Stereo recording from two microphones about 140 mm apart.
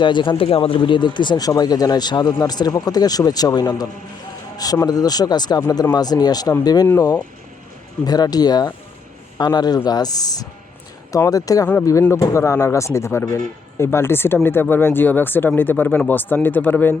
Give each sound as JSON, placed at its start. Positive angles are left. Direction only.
{"t": 0.0, "sound": "speech", "side_deg": 35}